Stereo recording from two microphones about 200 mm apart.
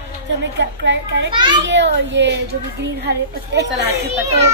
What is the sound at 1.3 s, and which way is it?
Speech, 25° right (ahead or behind).